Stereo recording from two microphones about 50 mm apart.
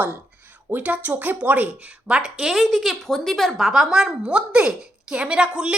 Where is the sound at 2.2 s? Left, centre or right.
Centre.